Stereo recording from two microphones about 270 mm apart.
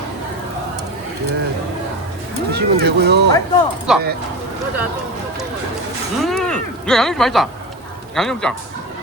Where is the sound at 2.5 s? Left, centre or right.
Right.